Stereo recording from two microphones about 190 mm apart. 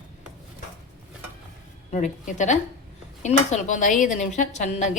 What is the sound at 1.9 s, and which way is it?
Speech, 40° left (ahead or behind).